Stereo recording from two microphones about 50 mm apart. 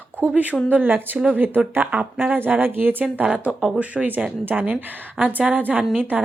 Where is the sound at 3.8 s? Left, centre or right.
Right.